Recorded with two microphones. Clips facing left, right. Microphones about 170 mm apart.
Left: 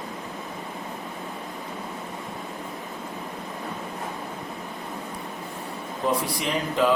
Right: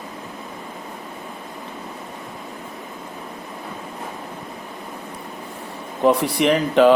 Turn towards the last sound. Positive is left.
turn(degrees=-70)  # may be behind; listen again after turning